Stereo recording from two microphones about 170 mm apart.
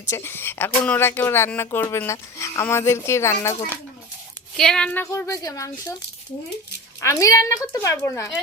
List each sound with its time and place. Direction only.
0.0 s speech: 15° left (ahead or behind)
4.5 s speech: 5° left (ahead or behind); by 5.7 s 20° left (ahead or behind)
7.0 s a woman's voice: 20° left (ahead or behind)